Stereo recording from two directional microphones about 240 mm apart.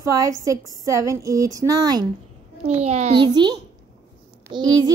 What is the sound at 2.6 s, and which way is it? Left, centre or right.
A child's voice, right.